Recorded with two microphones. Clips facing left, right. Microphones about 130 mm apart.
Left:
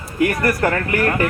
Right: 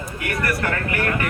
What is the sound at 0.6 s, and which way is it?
Speech, 35° left (ahead or behind).